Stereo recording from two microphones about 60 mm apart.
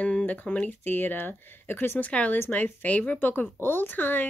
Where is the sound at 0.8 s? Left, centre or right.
Left.